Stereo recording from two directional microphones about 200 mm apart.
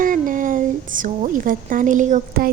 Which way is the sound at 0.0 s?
40° right (ahead or behind).